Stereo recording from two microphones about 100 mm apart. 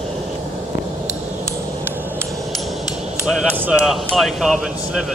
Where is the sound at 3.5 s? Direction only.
10° right (ahead or behind).